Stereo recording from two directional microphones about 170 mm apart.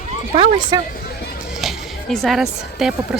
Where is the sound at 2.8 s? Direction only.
5° right (ahead or behind).